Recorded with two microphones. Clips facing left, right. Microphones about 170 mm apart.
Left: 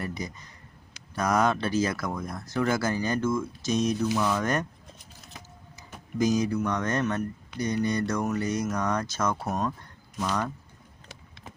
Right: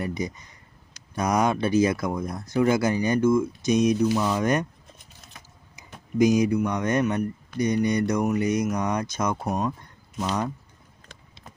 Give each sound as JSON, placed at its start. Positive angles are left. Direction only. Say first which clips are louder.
{"t": 0.0, "sound": "speech", "louder": "right 5 dB", "side_deg": -20}
{"t": 6.1, "sound": "speech", "louder": "right 5 dB", "side_deg": -15}